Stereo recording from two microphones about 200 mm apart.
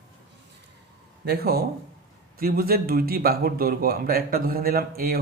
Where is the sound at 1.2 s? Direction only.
50° right (ahead or behind).